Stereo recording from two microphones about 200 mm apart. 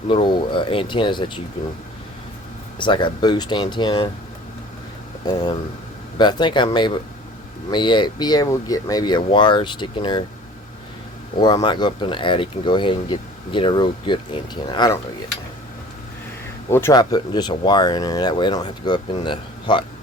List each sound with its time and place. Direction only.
0.1 s speech: 25° left (ahead or behind)
2.7 s speech: 25° left (ahead or behind)
5.2 s speech: 20° left (ahead or behind)
11.3 s speech: 20° left (ahead or behind)
16.6 s speech: 15° left (ahead or behind)